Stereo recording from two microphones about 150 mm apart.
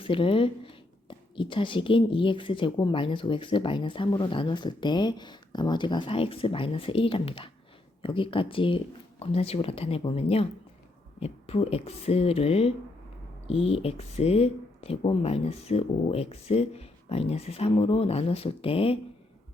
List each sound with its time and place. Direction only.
0.0 s speech: 35° left (ahead or behind)